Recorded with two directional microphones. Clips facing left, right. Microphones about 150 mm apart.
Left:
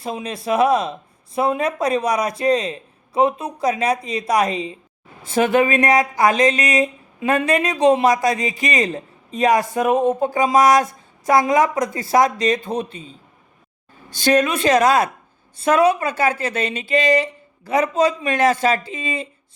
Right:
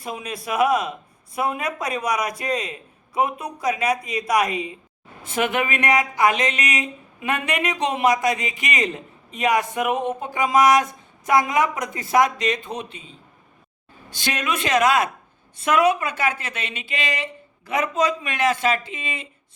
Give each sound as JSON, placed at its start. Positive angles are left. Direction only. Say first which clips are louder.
{"t": 0.0, "sound": "speech", "louder": "left 4 dB", "side_deg": 30}